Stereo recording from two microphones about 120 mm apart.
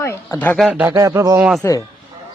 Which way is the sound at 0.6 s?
10° right (ahead or behind).